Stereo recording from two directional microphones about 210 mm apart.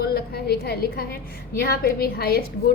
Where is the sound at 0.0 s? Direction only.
50° left (ahead or behind).